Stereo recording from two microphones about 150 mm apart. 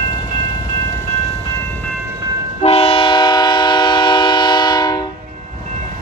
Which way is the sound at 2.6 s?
40° left (ahead or behind).